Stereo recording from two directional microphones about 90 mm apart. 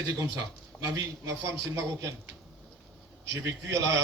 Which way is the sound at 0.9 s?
30° right (ahead or behind).